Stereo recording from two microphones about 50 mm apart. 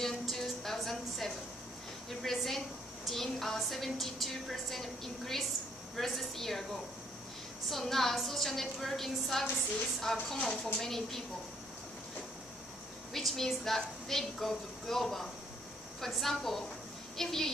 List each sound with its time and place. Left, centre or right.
0.0 s music: centre
0.7 s a sound: centre
2.2 s a woman's voice: centre
10.3 s speech: centre
10.6 s speech: centre
13.1 s a woman's voice: centre